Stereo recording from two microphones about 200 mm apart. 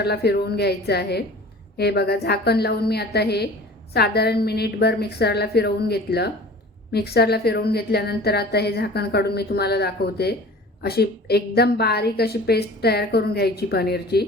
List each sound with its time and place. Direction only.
0.0 s a woman's voice: 55° left (ahead or behind)